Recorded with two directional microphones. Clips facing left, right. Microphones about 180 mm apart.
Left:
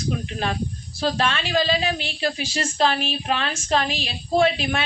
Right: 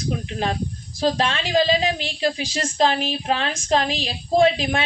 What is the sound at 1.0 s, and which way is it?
A woman's voice, 20° right (ahead or behind).